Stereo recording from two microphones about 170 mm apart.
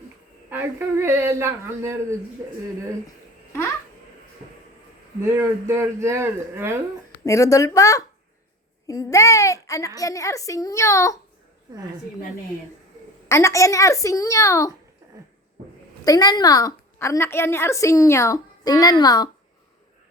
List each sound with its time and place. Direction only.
0.5 s speech: 15° right (ahead or behind)
5.2 s speech: 15° right (ahead or behind)
7.3 s a woman's voice: 20° left (ahead or behind)
13.2 s a woman's voice: 20° left (ahead or behind)
16.0 s a woman's voice: 20° left (ahead or behind)